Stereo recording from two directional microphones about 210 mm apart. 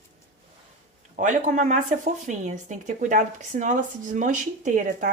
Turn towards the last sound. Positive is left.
turn(degrees=-40)  # may be behind; listen again after turning